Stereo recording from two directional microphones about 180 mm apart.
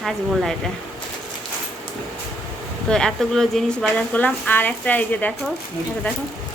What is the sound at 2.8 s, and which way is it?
A woman's voice, 5° left (ahead or behind).